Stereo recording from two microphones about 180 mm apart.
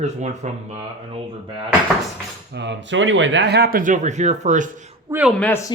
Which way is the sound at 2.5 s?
75° right (ahead or behind).